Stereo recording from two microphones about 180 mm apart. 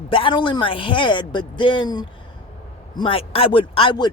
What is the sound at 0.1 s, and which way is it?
Speech, 30° left (ahead or behind).